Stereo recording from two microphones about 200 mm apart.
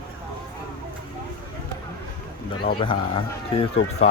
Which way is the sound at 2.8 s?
25° left (ahead or behind).